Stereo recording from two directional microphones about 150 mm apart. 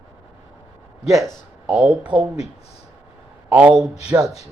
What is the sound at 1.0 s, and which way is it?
Speech, centre (ahead or behind).